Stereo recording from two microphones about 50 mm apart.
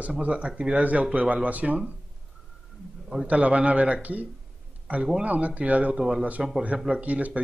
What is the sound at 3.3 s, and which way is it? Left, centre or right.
Speech, right.